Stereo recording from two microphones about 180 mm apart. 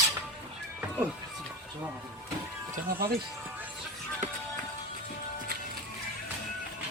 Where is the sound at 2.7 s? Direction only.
55° right (ahead or behind).